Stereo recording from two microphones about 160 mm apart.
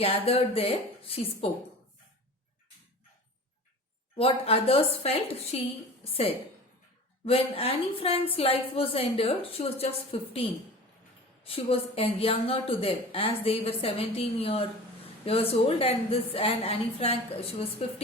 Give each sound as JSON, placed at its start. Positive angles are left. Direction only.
{"t": 0.0, "sound": "speech", "side_deg": 35}
{"t": 4.2, "sound": "speech", "side_deg": 35}
{"t": 7.3, "sound": "speech", "side_deg": 35}
{"t": 11.4, "sound": "speech", "side_deg": 35}